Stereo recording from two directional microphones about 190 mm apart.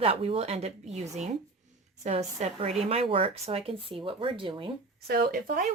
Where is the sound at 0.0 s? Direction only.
30° right (ahead or behind).